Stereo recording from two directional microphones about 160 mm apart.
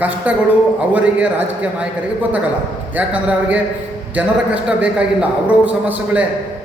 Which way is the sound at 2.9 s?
10° right (ahead or behind).